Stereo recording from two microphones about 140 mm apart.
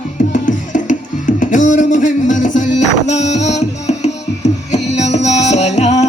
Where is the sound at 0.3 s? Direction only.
70° left (ahead or behind).